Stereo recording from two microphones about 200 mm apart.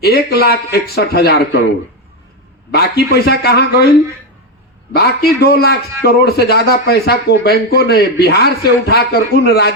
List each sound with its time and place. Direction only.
0.0 s speech: 55° left (ahead or behind)
2.7 s speech: 55° left (ahead or behind)
4.9 s speech: 50° left (ahead or behind)